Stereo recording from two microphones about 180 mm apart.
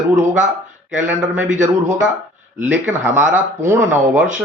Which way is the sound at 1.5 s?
45° right (ahead or behind).